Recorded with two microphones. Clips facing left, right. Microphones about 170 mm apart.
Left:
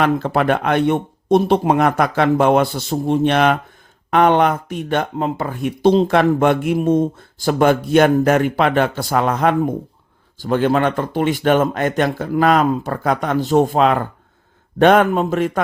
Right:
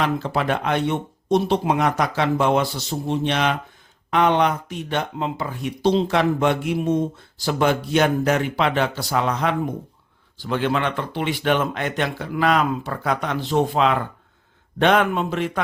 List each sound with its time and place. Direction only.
0.0 s speech: 55° left (ahead or behind)